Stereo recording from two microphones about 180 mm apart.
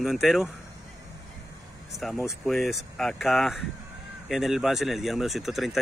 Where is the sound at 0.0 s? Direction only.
Centre (ahead or behind).